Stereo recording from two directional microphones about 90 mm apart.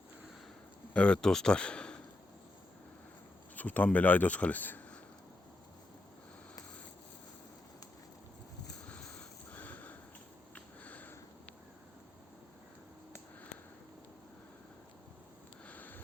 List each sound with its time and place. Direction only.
0.9 s speech: 10° left (ahead or behind)
3.5 s speech: 15° left (ahead or behind)
9.5 s sniff: 20° left (ahead or behind)
15.6 s a sound: 20° left (ahead or behind)